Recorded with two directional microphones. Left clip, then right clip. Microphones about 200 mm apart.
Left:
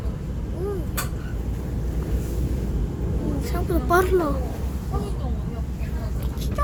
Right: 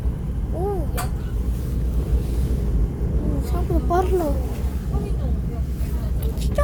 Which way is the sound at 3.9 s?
30° left (ahead or behind).